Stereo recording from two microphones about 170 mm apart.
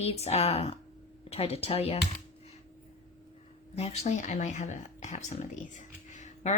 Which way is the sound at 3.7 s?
40° left (ahead or behind).